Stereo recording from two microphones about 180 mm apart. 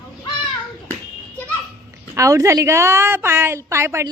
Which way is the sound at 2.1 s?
15° right (ahead or behind).